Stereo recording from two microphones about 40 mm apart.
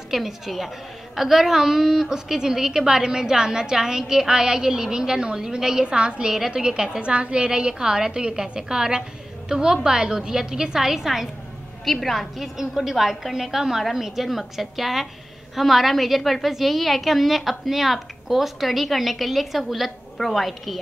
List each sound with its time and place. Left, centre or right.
0.1 s a woman's voice: centre
11.8 s a woman's voice: centre